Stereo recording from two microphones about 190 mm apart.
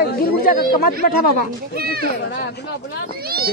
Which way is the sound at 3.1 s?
55° right (ahead or behind).